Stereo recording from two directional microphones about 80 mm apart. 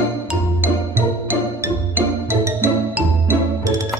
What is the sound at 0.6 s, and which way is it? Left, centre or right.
Music, right.